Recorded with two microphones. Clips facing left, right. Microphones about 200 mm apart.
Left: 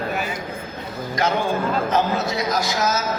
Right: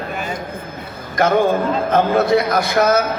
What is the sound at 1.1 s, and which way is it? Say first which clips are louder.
A man's voice: right 7 dB; 55° right (ahead or behind).